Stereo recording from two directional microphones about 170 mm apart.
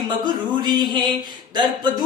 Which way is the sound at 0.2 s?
25° right (ahead or behind).